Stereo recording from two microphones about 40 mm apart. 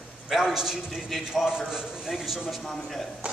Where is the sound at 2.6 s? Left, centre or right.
Centre.